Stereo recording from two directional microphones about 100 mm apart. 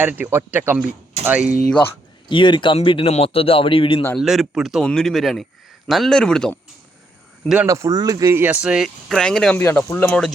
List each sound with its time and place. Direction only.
0.0 s speech: 20° right (ahead or behind)
2.3 s speech: 55° left (ahead or behind)
4.2 s speech: 5° right (ahead or behind)
7.4 s speech: 5° right (ahead or behind)
7.7 s speech: 30° right (ahead or behind)
8.4 s speech: 15° right (ahead or behind); by 9.6 s 5° left (ahead or behind)
9.6 s speech: 25° left (ahead or behind)
10.1 s speech: 5° left (ahead or behind)